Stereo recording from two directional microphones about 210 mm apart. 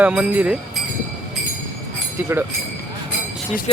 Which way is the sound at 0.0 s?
5° right (ahead or behind).